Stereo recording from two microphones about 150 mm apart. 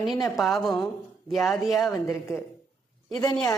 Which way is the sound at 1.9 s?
20° left (ahead or behind).